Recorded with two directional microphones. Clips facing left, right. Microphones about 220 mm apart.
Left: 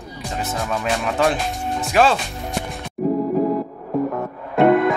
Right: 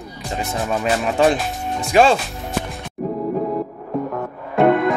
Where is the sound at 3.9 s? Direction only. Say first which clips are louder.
Left 2 dB; centre (ahead or behind).